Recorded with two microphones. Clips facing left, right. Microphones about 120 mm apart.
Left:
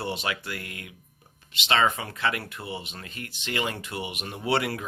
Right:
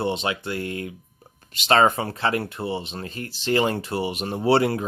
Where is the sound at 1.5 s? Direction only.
40° right (ahead or behind).